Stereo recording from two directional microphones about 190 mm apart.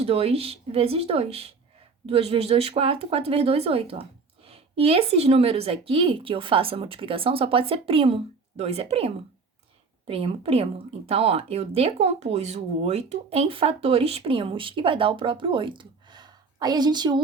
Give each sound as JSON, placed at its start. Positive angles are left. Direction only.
{"t": 0.0, "sound": "a woman's voice", "side_deg": -30}